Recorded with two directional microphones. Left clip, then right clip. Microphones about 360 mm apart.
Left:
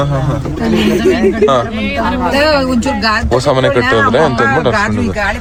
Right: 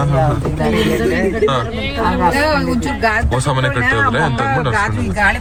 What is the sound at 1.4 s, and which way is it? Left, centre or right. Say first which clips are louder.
Speech: left 5 dB; left.